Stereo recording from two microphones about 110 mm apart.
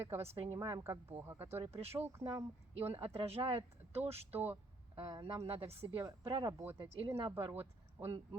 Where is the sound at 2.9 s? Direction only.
55° right (ahead or behind).